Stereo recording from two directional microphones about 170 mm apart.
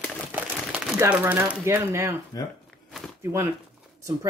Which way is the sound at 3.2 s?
15° right (ahead or behind).